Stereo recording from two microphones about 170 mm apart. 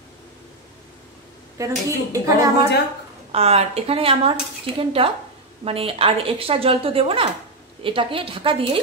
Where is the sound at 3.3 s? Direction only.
35° right (ahead or behind).